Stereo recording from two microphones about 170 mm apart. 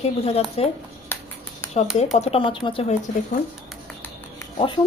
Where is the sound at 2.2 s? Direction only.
35° left (ahead or behind).